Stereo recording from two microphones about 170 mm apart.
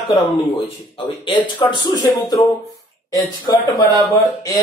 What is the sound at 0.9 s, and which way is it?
Speech, 30° left (ahead or behind).